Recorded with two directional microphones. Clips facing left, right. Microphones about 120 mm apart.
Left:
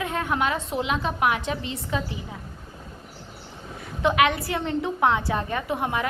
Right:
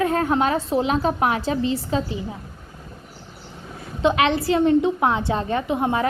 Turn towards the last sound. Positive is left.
turn(degrees=-30)  # may be behind; listen again after turning